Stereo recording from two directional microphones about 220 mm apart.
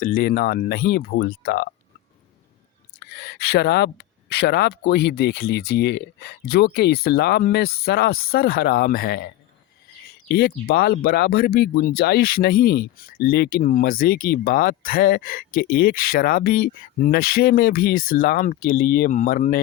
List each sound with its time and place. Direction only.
0.0 s speech: 40° left (ahead or behind)
3.1 s speech: 50° left (ahead or behind)